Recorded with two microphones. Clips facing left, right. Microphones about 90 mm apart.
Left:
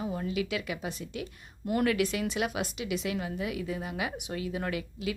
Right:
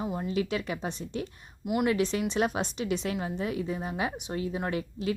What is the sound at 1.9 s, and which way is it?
A woman's voice, 30° right (ahead or behind).